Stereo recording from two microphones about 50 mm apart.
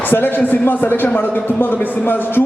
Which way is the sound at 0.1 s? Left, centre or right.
Left.